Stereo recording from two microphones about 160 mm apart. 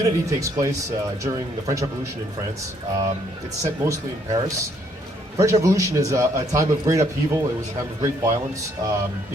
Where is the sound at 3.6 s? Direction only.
20° right (ahead or behind).